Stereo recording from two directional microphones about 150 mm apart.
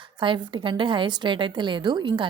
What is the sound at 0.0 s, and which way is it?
Speech, 35° right (ahead or behind).